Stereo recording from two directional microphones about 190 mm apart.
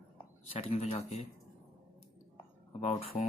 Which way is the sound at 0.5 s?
30° left (ahead or behind).